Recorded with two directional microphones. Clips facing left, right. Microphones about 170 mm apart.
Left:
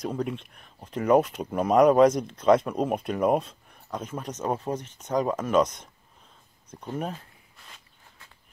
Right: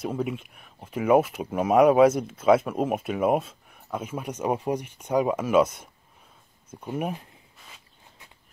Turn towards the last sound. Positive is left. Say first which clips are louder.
# right 1 dB
turn(degrees=-10)  # may be behind; listen again after turning